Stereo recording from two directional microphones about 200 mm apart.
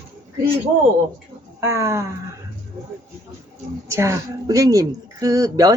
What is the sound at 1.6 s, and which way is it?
Speech, 15° right (ahead or behind).